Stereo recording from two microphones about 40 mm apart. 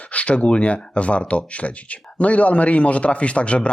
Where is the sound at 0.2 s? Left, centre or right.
Left.